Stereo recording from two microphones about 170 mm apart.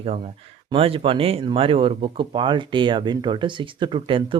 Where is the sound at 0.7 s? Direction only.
35° right (ahead or behind).